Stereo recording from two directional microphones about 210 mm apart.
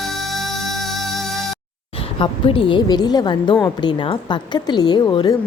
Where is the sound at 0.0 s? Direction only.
Centre (ahead or behind).